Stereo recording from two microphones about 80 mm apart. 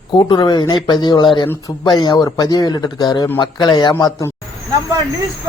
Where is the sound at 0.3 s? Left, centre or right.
Left.